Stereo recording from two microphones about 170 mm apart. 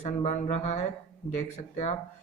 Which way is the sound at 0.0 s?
40° left (ahead or behind).